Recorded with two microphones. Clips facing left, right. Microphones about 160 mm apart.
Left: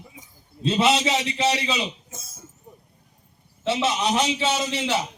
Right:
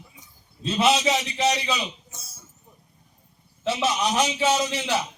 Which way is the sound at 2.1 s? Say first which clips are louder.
Left 5 dB; 50° left (ahead or behind).